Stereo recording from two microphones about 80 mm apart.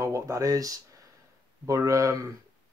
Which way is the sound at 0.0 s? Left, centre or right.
Right.